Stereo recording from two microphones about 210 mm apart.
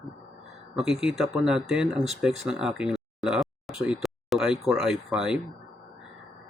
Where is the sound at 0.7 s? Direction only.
5° right (ahead or behind).